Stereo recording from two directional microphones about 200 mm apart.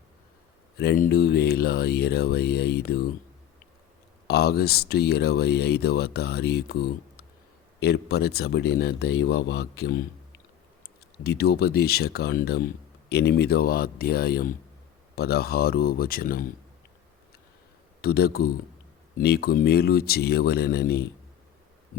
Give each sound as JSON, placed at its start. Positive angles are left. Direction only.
{"t": 0.8, "sound": "speech", "side_deg": 50}
{"t": 4.3, "sound": "speech", "side_deg": 50}
{"t": 11.2, "sound": "speech", "side_deg": 55}
{"t": 18.0, "sound": "speech", "side_deg": 50}